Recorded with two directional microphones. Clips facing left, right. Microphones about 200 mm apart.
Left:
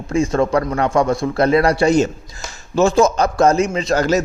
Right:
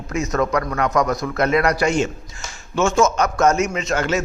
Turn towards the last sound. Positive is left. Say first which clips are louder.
# left 5 dB
turn(degrees=35)  # may be behind; listen again after turning